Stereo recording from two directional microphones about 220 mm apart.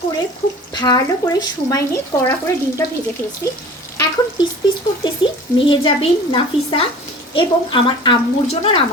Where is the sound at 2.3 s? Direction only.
15° left (ahead or behind).